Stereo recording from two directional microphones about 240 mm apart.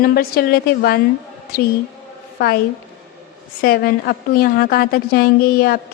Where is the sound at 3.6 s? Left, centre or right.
Left.